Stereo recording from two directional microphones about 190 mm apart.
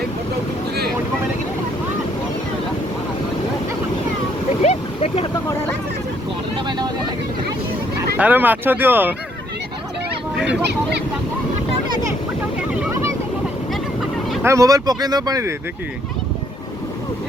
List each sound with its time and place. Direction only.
4.6 s a sound: 35° left (ahead or behind)
6.7 s vehicle: 20° right (ahead or behind)
8.2 s speech: 10° right (ahead or behind)
10.3 s a sound: 5° right (ahead or behind)
12.7 s vehicle: 10° right (ahead or behind)
14.4 s speech: 15° right (ahead or behind)